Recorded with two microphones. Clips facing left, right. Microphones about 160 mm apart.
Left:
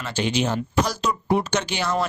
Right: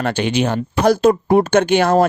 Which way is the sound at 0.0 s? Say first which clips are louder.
Right 6 dB; 60° right (ahead or behind).